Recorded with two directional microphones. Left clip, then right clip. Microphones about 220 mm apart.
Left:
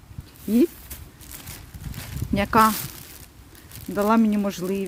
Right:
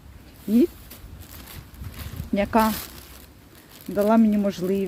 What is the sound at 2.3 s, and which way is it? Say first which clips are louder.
Speech: left 3 dB; 20° left (ahead or behind).